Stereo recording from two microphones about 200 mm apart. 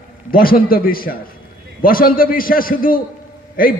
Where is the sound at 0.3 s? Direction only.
45° left (ahead or behind).